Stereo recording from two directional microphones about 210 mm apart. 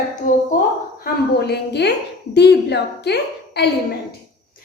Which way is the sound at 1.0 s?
50° left (ahead or behind).